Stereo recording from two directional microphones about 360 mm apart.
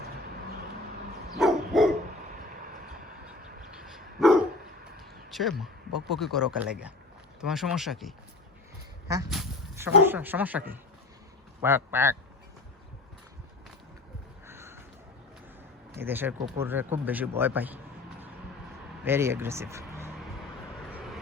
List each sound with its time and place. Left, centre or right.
1.4 s dog: centre
2.3 s vehicle: right
3.8 s dog: centre
4.9 s a sound: centre
6.1 s speech: centre
9.0 s a sound: centre
10.1 s speech: centre
14.4 s a sound: centre
15.9 s speech: centre
19.0 s speech: centre